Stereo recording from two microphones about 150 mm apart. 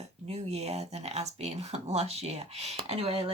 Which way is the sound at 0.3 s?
45° right (ahead or behind).